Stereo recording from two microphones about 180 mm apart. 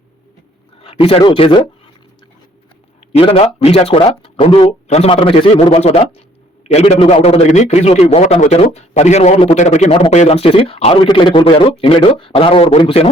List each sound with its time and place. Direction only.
0.8 s speech: 30° left (ahead or behind)
3.1 s a man's voice: 35° left (ahead or behind)